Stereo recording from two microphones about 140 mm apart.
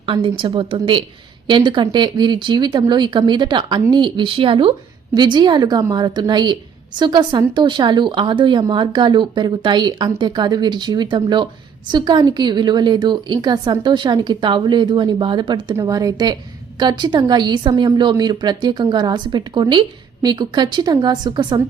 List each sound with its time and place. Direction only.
0.0 s speech: 40° right (ahead or behind)